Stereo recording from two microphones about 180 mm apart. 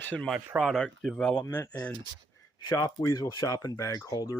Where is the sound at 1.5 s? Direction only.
20° left (ahead or behind).